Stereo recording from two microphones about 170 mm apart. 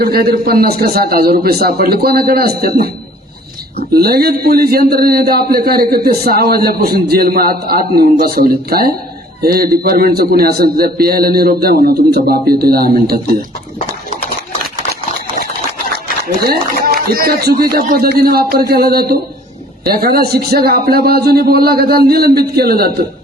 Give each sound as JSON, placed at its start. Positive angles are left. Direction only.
{"t": 0.0, "sound": "a man's voice", "side_deg": -65}
{"t": 3.9, "sound": "a man's voice", "side_deg": -65}
{"t": 16.2, "sound": "a man's voice", "side_deg": -65}